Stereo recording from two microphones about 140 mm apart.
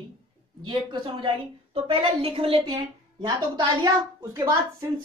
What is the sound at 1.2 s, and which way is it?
A woman's voice, 40° right (ahead or behind).